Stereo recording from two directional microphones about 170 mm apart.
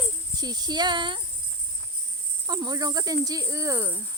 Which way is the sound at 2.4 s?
25° right (ahead or behind).